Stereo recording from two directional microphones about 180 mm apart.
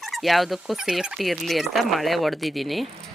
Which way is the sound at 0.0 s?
Centre (ahead or behind).